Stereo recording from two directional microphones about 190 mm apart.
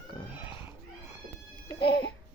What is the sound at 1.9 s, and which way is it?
Alarm clock, 70° left (ahead or behind).